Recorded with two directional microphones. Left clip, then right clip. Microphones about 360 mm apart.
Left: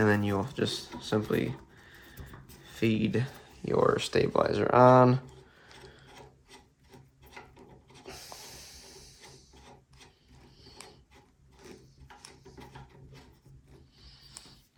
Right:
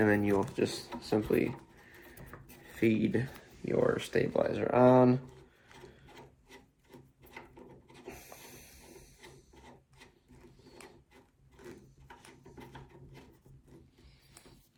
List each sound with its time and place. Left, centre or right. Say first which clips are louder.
0.0 s a sound: left 1 dB; left
1.1 s speech: even; left
2.8 s speech: even; left
3.7 s speech: left 4 dB; left